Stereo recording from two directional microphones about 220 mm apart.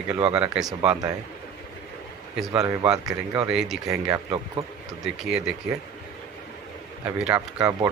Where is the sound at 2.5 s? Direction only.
15° right (ahead or behind).